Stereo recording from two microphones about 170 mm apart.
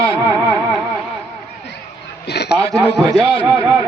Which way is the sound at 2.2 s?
75° left (ahead or behind).